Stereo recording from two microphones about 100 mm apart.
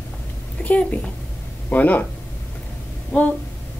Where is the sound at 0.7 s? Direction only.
15° left (ahead or behind).